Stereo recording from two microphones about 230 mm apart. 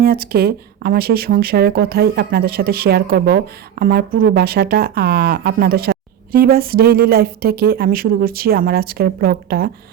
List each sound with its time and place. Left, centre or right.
0.0 s speech: right
4.1 s speech: right